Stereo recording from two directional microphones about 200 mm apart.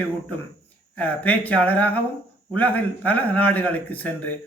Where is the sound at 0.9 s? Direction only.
5° left (ahead or behind).